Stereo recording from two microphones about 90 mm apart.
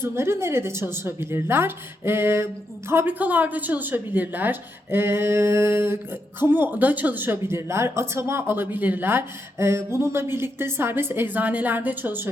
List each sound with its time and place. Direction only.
0.0 s a woman's voice: 30° right (ahead or behind)